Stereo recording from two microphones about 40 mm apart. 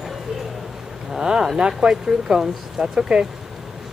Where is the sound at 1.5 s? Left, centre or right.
Centre.